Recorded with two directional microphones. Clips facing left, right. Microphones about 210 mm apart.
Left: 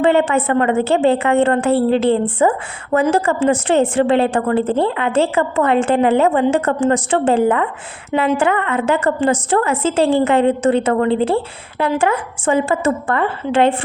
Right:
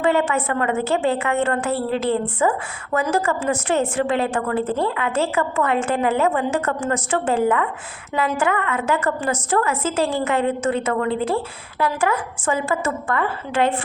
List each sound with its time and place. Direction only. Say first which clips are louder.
0.0 s a woman's voice: left 5 dB; 30° left (ahead or behind)